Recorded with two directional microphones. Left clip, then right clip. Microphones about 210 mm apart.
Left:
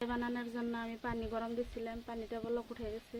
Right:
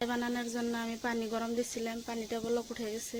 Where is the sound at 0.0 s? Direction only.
30° right (ahead or behind).